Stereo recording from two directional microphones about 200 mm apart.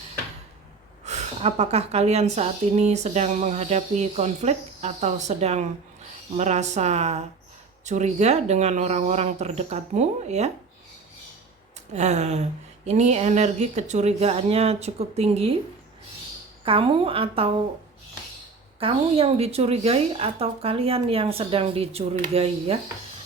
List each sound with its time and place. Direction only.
1.0 s a woman's voice: 35° right (ahead or behind)
11.9 s a woman's voice: 35° right (ahead or behind)
16.6 s speech: 25° right (ahead or behind)
18.8 s speech: 30° right (ahead or behind)